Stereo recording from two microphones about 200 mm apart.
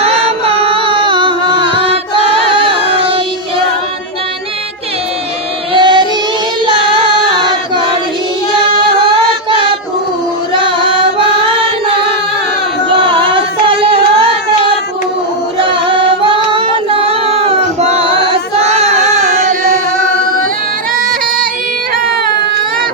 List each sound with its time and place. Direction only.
0.0 s music: 30° right (ahead or behind)
5.7 s child singing: 20° right (ahead or behind)
6.9 s singing: 25° right (ahead or behind)
10.7 s music: 25° right (ahead or behind)
13.0 s singing: 25° right (ahead or behind)
15.9 s child singing: 25° right (ahead or behind)
18.6 s a sound: 35° right (ahead or behind)